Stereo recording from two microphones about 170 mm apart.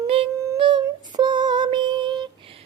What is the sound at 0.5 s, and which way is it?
Female singing, 30° right (ahead or behind).